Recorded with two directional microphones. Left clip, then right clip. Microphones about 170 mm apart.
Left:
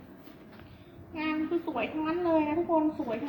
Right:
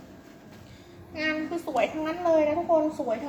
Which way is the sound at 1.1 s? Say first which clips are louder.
Right 2 dB; 20° right (ahead or behind).